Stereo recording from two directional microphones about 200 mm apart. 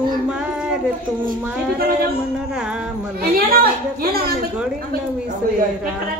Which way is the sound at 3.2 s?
50° right (ahead or behind).